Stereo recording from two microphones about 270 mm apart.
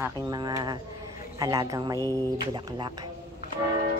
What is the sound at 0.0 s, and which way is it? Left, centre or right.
Speech, centre.